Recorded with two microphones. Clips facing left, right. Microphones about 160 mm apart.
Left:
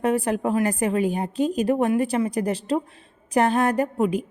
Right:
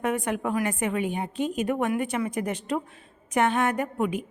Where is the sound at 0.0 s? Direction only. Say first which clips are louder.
Left 5 dB; 30° left (ahead or behind).